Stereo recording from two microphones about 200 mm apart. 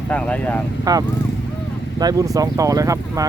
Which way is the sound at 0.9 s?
20° right (ahead or behind).